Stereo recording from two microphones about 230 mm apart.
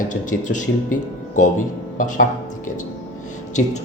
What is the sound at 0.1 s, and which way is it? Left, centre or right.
Speech, left.